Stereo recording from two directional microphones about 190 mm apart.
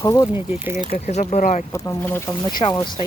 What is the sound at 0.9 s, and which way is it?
Speech, 35° left (ahead or behind).